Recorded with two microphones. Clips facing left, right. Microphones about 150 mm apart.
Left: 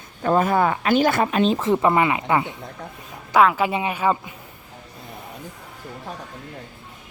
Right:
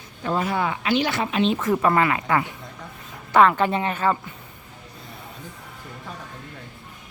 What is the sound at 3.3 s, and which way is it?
Speech, 5° left (ahead or behind).